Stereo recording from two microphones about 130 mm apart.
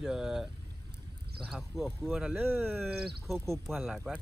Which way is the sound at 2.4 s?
15° right (ahead or behind).